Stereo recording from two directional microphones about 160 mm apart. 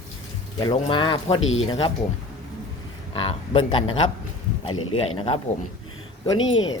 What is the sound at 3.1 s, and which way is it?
Speech, 35° left (ahead or behind).